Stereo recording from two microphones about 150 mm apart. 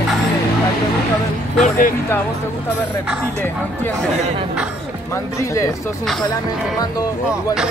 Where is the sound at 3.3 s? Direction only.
15° left (ahead or behind).